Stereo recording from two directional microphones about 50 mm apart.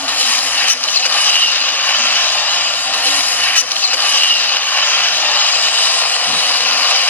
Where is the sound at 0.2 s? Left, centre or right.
Left.